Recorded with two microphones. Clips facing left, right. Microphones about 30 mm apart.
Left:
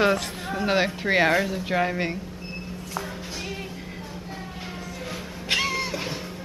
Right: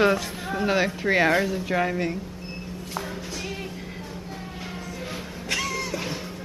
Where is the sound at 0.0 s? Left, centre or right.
Centre.